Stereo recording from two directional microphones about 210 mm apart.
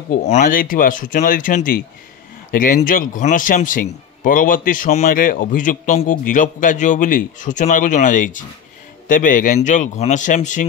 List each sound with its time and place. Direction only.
0.3 s a man's voice: 40° left (ahead or behind)